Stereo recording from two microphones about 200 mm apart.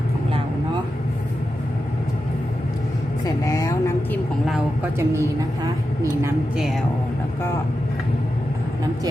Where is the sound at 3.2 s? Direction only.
15° left (ahead or behind).